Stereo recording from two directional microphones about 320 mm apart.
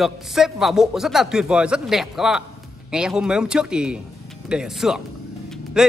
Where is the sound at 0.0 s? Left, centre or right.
Centre.